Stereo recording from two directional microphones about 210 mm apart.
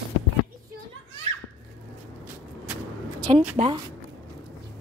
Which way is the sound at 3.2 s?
30° right (ahead or behind).